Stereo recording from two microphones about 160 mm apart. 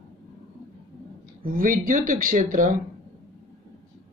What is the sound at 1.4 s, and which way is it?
Speech, 60° right (ahead or behind).